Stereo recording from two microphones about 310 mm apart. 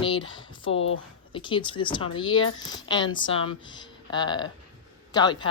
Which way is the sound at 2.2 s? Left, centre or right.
Left.